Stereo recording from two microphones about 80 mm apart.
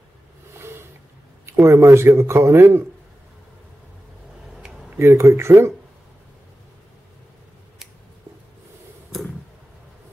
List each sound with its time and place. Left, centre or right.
0.6 s a sound: right
1.4 s speech: right
4.9 s speech: right